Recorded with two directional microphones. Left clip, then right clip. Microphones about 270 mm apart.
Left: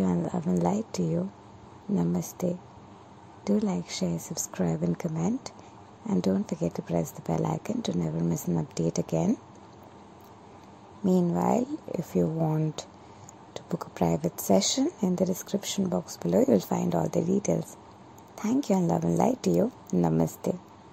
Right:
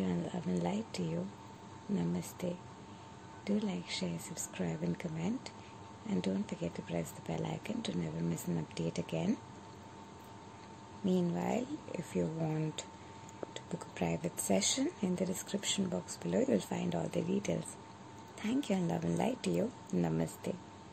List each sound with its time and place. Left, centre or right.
0.0 s a sound: centre
2.0 s speech: left
11.3 s speech: centre